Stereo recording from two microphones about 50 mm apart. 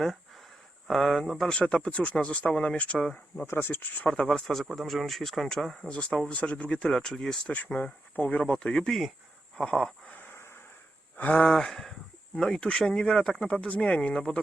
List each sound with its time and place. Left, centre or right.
0.9 s speech: centre
1.5 s speech: centre
2.6 s speech: left
3.0 s speech: centre
3.6 s speech: left
4.0 s speech: centre
4.7 s speech: centre
5.9 s speech: left
6.8 s speech: centre
7.5 s speech: left; by 9.9 s centre
11.2 s speech: left
11.4 s speech: centre